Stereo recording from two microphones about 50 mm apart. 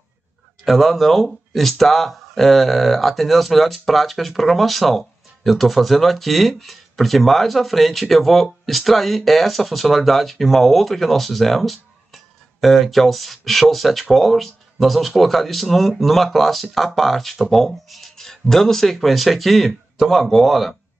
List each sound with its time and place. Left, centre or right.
0.7 s speech: centre